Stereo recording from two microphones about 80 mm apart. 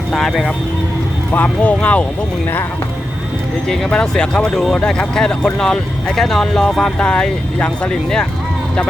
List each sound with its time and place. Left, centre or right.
0.1 s speech: centre
1.3 s speech: left
3.7 s speech: centre